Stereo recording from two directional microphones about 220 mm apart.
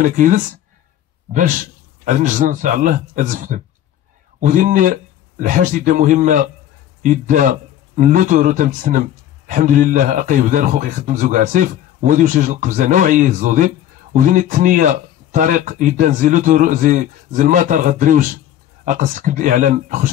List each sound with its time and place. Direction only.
0.0 s a man's voice: 35° right (ahead or behind)